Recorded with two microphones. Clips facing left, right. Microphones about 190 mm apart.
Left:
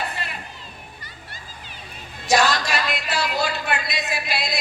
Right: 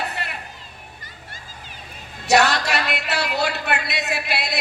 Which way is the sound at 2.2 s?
65° right (ahead or behind).